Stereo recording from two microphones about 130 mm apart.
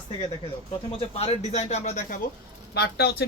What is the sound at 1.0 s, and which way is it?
Speech, 50° left (ahead or behind).